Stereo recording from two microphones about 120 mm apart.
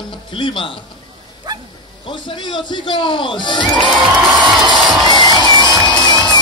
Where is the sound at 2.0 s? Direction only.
40° left (ahead or behind).